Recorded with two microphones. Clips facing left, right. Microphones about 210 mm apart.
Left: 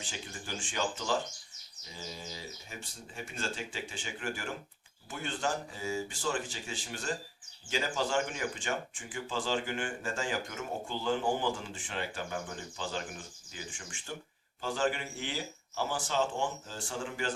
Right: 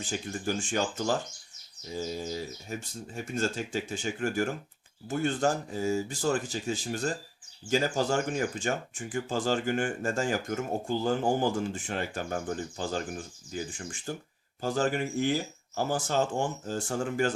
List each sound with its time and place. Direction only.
0.1 s speech: 45° right (ahead or behind)